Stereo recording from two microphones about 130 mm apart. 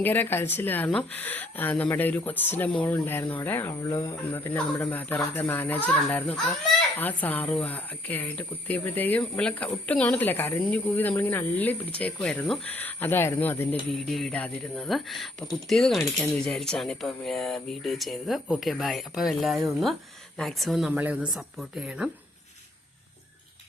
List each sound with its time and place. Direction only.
0.0 s speech: 15° left (ahead or behind)
13.9 s speech: centre (ahead or behind)
20.9 s speech: 10° right (ahead or behind)